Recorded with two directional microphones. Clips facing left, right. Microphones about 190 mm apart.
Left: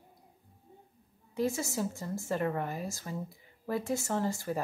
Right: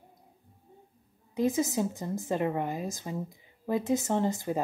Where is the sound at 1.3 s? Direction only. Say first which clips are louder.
Right 5 dB; 20° right (ahead or behind).